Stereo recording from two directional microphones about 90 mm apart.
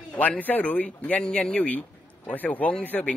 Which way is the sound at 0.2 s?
20° left (ahead or behind).